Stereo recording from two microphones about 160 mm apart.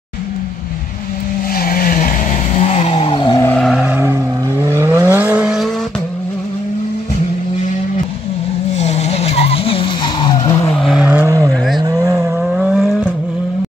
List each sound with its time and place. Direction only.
1.5 s vehicle: 65° left (ahead or behind)
2.7 s vehicle: 40° left (ahead or behind)
3.3 s a sound: 10° left (ahead or behind)
3.6 s vehicle: 5° right (ahead or behind)
8.7 s skidding: 45° left (ahead or behind); by 10.7 s 25° left (ahead or behind)
10.7 s vehicle: centre (ahead or behind)
11.1 s vehicle: 15° right (ahead or behind)
12.4 s vehicle: 5° right (ahead or behind)